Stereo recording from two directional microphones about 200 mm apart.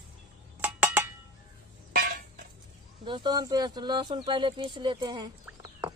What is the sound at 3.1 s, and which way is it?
Speech, 20° right (ahead or behind).